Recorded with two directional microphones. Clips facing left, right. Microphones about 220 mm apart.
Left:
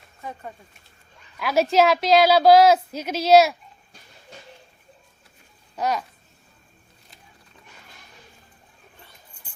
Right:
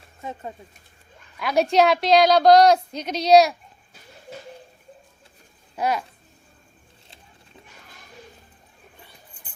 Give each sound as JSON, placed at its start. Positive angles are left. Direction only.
{"t": 0.2, "sound": "speech", "side_deg": -25}
{"t": 1.4, "sound": "a woman's voice", "side_deg": 0}
{"t": 5.7, "sound": "babbling", "side_deg": -10}